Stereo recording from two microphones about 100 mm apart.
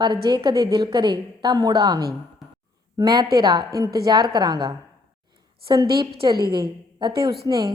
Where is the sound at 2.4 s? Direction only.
Centre (ahead or behind).